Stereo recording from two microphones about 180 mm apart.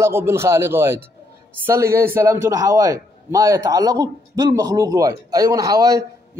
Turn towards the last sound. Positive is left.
turn(degrees=-20)  # may be behind; listen again after turning